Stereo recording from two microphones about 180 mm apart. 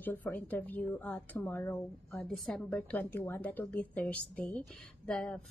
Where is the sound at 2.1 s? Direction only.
5° left (ahead or behind).